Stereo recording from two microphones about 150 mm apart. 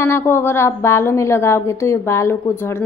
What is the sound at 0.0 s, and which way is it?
Speech, 15° left (ahead or behind).